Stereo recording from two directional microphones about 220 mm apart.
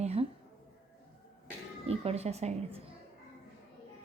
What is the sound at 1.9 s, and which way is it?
Speech, 30° right (ahead or behind).